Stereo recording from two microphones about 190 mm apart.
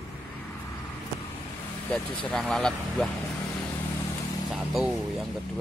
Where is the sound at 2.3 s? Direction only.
5° left (ahead or behind).